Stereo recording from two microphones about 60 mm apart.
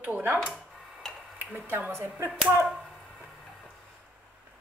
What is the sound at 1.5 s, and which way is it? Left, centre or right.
Speech, right.